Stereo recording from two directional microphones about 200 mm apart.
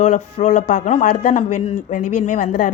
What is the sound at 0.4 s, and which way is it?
A man's voice, 40° left (ahead or behind).